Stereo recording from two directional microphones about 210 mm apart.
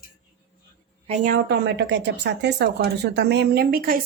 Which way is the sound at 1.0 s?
35° right (ahead or behind).